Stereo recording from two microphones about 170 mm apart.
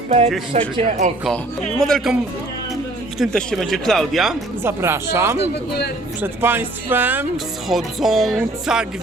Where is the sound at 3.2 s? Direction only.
Centre (ahead or behind).